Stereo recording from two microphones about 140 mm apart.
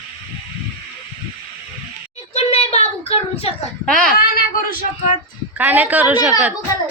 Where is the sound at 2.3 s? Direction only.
50° left (ahead or behind).